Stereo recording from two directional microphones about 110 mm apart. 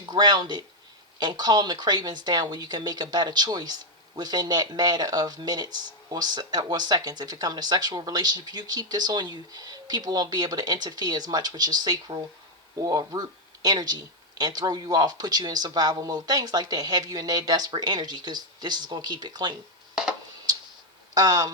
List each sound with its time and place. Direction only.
0.0 s speech: 40° right (ahead or behind)
21.2 s speech: 35° right (ahead or behind)